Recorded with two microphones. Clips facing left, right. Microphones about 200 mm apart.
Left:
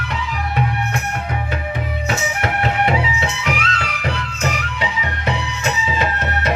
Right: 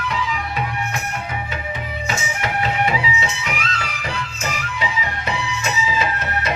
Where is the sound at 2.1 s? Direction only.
60° left (ahead or behind).